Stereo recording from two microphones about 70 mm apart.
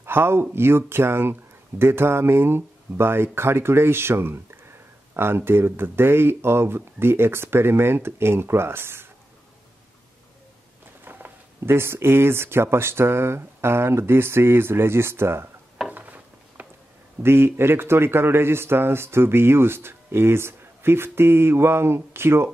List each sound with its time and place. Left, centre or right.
0.0 s speech: right
11.1 s speech: right
15.9 s a sound: right
17.2 s speech: right